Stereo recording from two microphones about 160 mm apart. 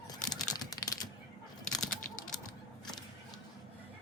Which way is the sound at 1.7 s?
5° left (ahead or behind).